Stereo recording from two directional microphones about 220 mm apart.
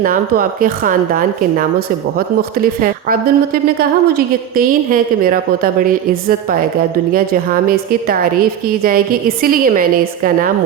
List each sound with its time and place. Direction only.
0.0 s a woman's voice: 40° right (ahead or behind)
7.7 s a woman's voice: 40° right (ahead or behind)